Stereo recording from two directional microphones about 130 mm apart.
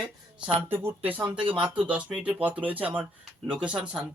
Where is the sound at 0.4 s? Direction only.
15° right (ahead or behind).